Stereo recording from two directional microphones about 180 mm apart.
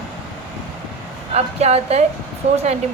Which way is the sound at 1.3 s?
35° right (ahead or behind).